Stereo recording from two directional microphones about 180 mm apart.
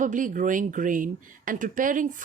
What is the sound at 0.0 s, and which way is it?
Speech, 45° right (ahead or behind).